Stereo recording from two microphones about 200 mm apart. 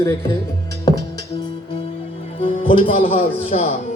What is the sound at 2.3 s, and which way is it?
Speech, 25° left (ahead or behind).